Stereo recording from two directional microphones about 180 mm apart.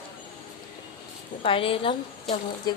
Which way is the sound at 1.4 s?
30° left (ahead or behind).